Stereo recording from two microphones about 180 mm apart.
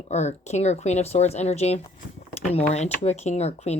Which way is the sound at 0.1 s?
40° left (ahead or behind).